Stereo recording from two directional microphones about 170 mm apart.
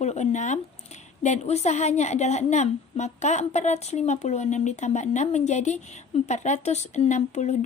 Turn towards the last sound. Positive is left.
turn(degrees=45)  # may be behind; listen again after turning